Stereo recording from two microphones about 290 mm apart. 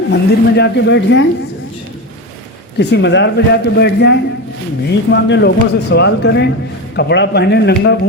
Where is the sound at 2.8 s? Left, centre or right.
Left.